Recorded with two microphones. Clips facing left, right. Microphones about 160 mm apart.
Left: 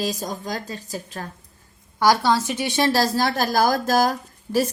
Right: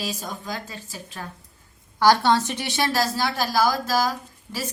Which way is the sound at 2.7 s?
30° left (ahead or behind).